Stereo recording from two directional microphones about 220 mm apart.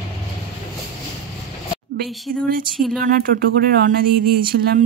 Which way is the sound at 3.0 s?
40° right (ahead or behind).